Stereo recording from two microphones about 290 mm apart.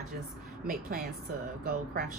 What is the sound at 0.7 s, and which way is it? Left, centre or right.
Speech, right.